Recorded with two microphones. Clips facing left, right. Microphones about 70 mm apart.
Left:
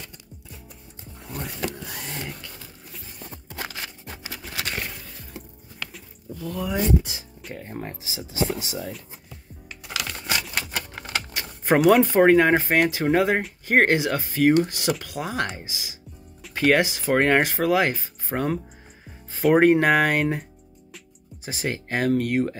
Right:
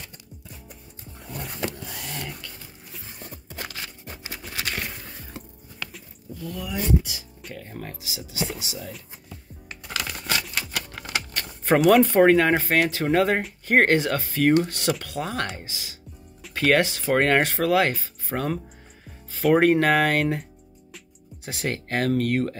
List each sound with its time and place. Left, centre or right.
2.0 s a sound: centre
3.7 s music: left
4.5 s a sound: left
5.9 s music: centre
6.7 s speech: left
9.8 s music: centre
11.3 s a sound: centre
12.1 s speech: centre
21.5 s speech: centre